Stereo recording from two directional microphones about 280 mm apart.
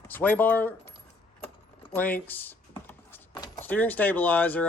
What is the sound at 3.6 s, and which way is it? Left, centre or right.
Speech, centre.